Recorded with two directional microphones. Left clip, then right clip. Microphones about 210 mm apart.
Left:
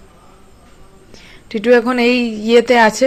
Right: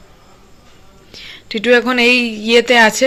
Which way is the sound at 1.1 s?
10° left (ahead or behind).